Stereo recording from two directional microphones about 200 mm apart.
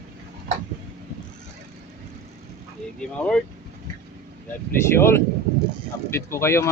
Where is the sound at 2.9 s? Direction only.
5° left (ahead or behind).